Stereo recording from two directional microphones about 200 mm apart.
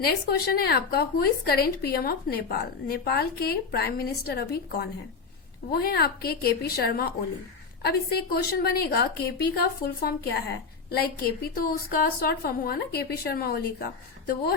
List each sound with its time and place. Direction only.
0.0 s a woman's voice: 50° left (ahead or behind)